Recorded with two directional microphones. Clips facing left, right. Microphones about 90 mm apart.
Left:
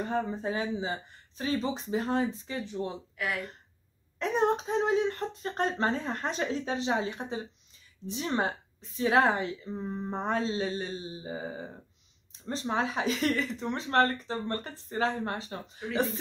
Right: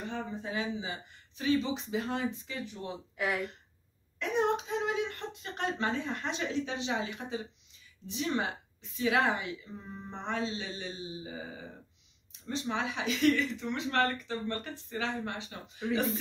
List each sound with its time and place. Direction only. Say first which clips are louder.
0.0 s speech: left 7 dB; 40° left (ahead or behind)
3.2 s speech: right 1 dB; 20° right (ahead or behind)
4.2 s speech: left 3 dB; 35° left (ahead or behind)